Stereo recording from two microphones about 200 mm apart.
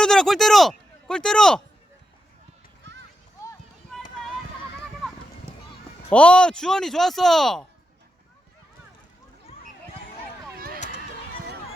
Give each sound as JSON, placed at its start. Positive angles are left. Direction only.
{"t": 0.0, "sound": "speech", "side_deg": 5}
{"t": 6.1, "sound": "speech", "side_deg": 5}
{"t": 9.5, "sound": "a sound", "side_deg": 30}
{"t": 10.5, "sound": "run", "side_deg": -50}